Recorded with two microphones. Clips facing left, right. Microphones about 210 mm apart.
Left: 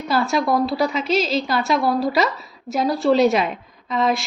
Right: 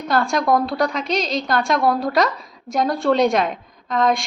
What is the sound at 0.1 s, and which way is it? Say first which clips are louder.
A woman's voice: right 1 dB; 5° left (ahead or behind).